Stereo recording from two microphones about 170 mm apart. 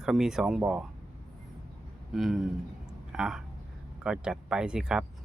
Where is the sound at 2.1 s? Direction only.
Centre (ahead or behind).